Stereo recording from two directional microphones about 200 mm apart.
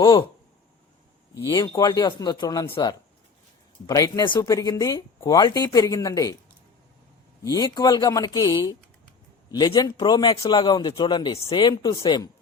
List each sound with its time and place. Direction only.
0.0 s a man's voice: 25° left (ahead or behind)
1.5 s a man's voice: 20° left (ahead or behind)
3.8 s speech: 20° left (ahead or behind)
7.4 s a man's voice: 20° left (ahead or behind)